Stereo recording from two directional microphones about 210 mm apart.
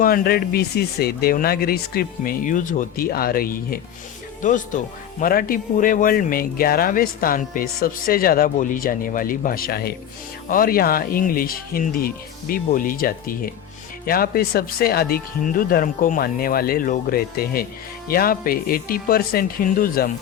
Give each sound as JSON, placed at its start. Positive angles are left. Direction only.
{"t": 0.0, "sound": "speech", "side_deg": 45}
{"t": 5.2, "sound": "speech", "side_deg": 45}